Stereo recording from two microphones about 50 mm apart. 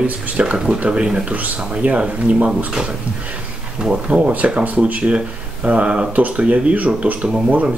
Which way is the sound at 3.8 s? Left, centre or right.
Centre.